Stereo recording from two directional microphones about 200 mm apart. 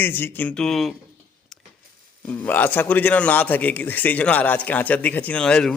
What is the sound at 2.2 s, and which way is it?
A man's voice, 10° left (ahead or behind).